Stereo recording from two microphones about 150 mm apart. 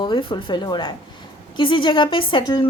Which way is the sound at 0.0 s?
30° left (ahead or behind).